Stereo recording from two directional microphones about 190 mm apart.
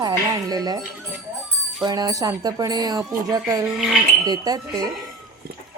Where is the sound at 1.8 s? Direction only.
20° right (ahead or behind).